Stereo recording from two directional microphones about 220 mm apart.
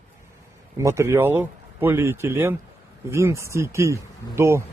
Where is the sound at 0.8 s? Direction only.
15° right (ahead or behind).